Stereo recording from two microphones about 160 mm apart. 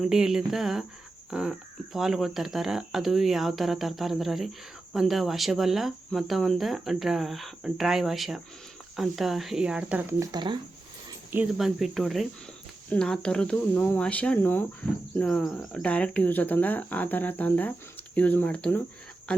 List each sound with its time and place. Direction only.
0.0 s speech: 5° right (ahead or behind)
10.2 s speech: 25° right (ahead or behind)
11.5 s speech: centre (ahead or behind)